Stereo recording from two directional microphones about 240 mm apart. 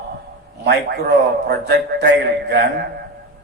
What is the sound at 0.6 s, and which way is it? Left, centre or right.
A man's voice, right.